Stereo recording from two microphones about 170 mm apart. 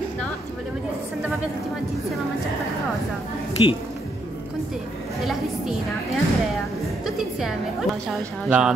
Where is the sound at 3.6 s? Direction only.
30° left (ahead or behind).